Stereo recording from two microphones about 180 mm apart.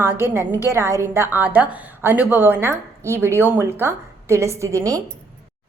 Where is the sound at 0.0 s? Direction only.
15° right (ahead or behind).